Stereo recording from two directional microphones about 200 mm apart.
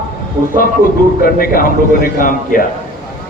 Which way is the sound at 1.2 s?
45° left (ahead or behind).